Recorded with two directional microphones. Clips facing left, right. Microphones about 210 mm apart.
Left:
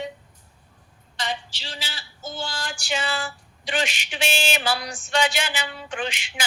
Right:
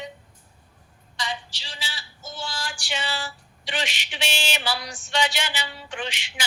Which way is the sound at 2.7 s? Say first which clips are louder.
Left 4 dB; 45° left (ahead or behind).